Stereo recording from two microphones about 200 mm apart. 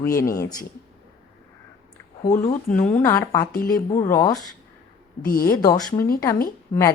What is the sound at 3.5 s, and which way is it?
Speech, 45° left (ahead or behind).